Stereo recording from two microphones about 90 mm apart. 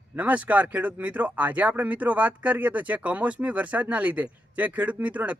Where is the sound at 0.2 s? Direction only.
15° right (ahead or behind).